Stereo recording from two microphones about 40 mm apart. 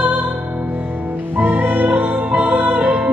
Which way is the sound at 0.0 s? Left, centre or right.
Right.